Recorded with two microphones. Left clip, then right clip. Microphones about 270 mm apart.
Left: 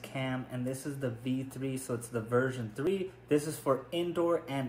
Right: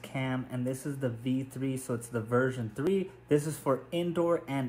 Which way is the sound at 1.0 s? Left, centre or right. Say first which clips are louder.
Right 3 dB; centre.